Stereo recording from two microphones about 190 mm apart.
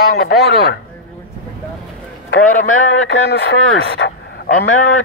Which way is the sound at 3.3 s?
70° left (ahead or behind).